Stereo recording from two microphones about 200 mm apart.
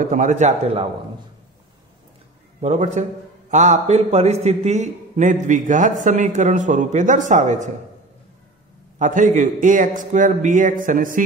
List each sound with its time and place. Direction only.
0.0 s a man's voice: 40° right (ahead or behind)
2.6 s a man's voice: 35° right (ahead or behind)
8.9 s a man's voice: 40° right (ahead or behind)